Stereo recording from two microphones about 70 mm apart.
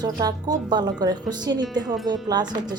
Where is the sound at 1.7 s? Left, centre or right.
Right.